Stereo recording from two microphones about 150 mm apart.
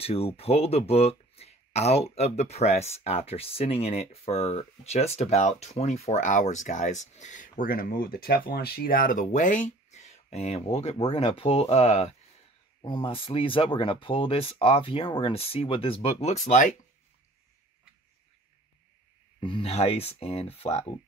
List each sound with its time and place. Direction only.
0.0 s speech: 40° left (ahead or behind)
12.8 s speech: 35° left (ahead or behind); by 16.7 s 55° left (ahead or behind)
19.4 s speech: 35° left (ahead or behind)